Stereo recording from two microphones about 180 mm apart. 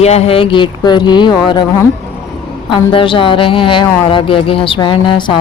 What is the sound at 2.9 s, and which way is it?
Speech, 30° left (ahead or behind).